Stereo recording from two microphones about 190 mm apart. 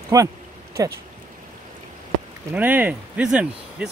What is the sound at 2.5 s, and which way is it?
Speech, 10° right (ahead or behind).